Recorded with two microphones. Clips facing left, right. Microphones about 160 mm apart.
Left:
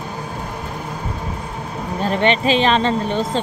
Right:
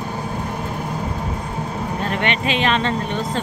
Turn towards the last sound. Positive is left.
turn(degrees=30)  # may be behind; listen again after turning